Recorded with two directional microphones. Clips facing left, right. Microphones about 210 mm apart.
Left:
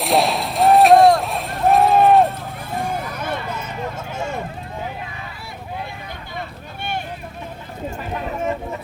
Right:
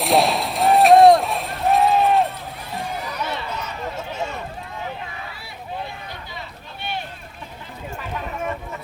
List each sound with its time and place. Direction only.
0.0 s a sound: centre (ahead or behind)
1.9 s run: 50° left (ahead or behind)
2.7 s vehicle: 50° left (ahead or behind)